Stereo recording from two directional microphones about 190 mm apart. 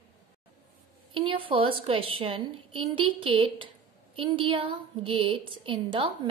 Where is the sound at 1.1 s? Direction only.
25° right (ahead or behind).